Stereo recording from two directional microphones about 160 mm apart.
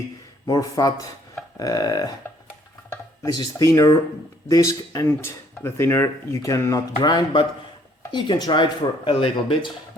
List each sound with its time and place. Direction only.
0.4 s speech: 25° left (ahead or behind)